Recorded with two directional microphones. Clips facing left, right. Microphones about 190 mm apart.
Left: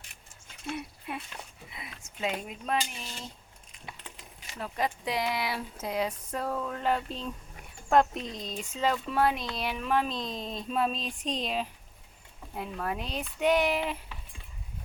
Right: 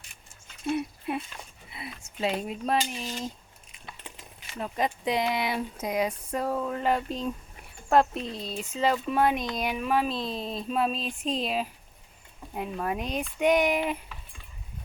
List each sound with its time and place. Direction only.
0.7 s a sound: 25° right (ahead or behind)
4.6 s speech: 20° right (ahead or behind); by 8.2 s 5° right (ahead or behind)
8.2 s speech: 35° right (ahead or behind)
8.5 s speech: 10° right (ahead or behind)